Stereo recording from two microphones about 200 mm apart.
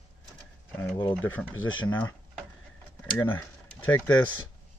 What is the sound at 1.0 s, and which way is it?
Speech, 10° left (ahead or behind).